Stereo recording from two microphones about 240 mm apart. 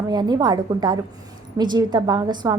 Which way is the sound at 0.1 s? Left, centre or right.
Centre.